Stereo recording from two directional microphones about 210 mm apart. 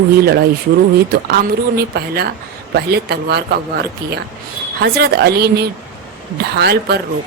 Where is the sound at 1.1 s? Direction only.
50° right (ahead or behind).